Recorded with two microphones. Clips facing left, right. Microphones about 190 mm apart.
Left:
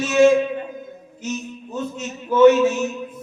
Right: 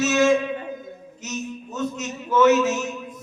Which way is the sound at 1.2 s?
30° left (ahead or behind).